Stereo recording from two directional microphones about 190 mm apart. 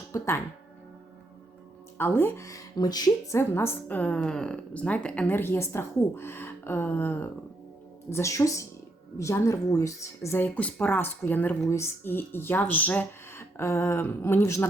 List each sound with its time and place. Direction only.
0.1 s speech: 10° left (ahead or behind)
2.0 s speech: 10° left (ahead or behind)